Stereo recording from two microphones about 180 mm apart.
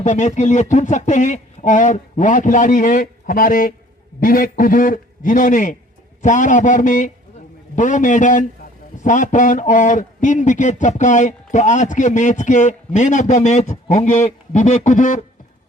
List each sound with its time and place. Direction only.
0.0 s a man's voice: 40° left (ahead or behind)